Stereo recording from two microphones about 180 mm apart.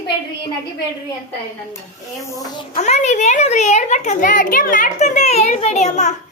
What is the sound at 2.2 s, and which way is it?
Speech, 20° left (ahead or behind).